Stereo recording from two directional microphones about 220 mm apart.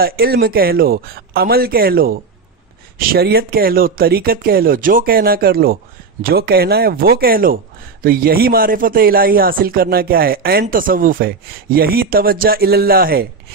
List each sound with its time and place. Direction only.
0.0 s speech: 45° right (ahead or behind)